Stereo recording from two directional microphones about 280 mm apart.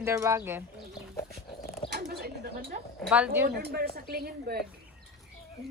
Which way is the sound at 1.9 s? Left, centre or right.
Right.